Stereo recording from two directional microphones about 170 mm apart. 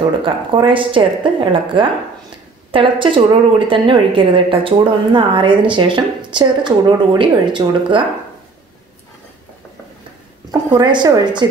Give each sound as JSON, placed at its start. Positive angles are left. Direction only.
{"t": 0.0, "sound": "a woman's voice", "side_deg": -30}
{"t": 10.7, "sound": "a woman's voice", "side_deg": -25}